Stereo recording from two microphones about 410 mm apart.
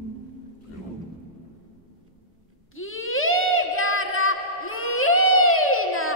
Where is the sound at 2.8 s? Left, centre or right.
Left.